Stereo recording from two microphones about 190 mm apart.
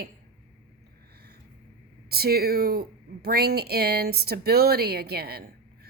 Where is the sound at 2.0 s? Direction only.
55° right (ahead or behind).